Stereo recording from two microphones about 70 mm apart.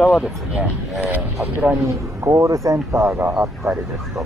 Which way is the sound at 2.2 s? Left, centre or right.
Right.